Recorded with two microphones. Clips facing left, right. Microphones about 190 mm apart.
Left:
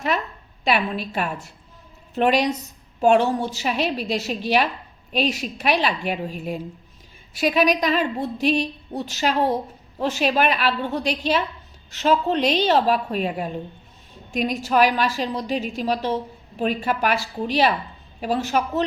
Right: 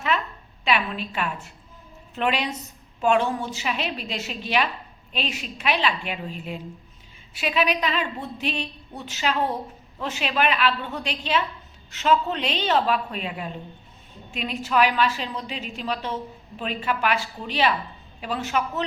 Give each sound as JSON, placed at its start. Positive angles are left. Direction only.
{"t": 0.6, "sound": "a woman's voice", "side_deg": 40}
{"t": 7.3, "sound": "a woman's voice", "side_deg": 40}